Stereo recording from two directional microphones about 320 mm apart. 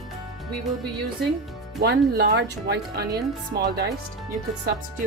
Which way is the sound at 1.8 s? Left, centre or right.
Right.